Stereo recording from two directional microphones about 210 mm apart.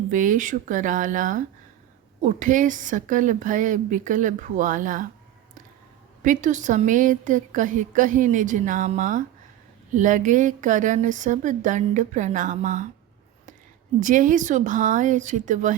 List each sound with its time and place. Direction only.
0.1 s a woman's voice: 40° right (ahead or behind)
6.2 s a woman's voice: 35° right (ahead or behind)
14.0 s a woman's voice: 40° right (ahead or behind)